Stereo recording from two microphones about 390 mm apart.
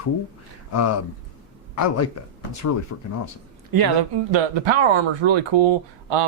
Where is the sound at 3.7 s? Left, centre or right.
Right.